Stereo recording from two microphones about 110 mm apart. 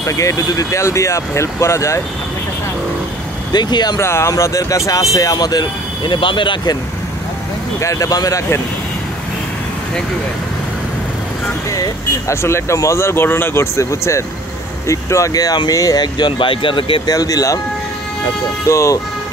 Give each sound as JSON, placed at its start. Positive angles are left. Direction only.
{"t": 0.0, "sound": "speech", "side_deg": 30}
{"t": 3.5, "sound": "speech", "side_deg": 40}
{"t": 4.0, "sound": "speech", "side_deg": 25}
{"t": 7.8, "sound": "speech", "side_deg": 30}
{"t": 11.7, "sound": "speech", "side_deg": 30}
{"t": 17.0, "sound": "speech", "side_deg": 35}
{"t": 18.7, "sound": "speech", "side_deg": 25}